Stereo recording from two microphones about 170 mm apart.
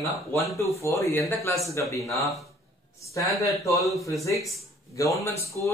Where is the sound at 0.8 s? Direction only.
15° left (ahead or behind).